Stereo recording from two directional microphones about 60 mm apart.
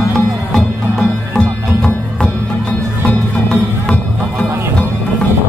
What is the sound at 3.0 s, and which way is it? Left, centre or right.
Music, left.